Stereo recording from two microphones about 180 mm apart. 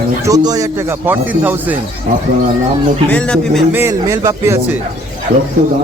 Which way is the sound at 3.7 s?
15° right (ahead or behind).